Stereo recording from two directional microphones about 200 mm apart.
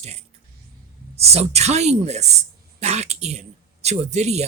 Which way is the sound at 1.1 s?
30° right (ahead or behind).